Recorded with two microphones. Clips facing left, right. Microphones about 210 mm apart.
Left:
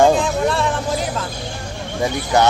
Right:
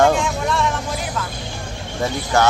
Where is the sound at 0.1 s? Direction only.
35° left (ahead or behind).